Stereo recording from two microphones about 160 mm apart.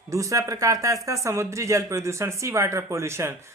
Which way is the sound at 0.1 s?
20° right (ahead or behind).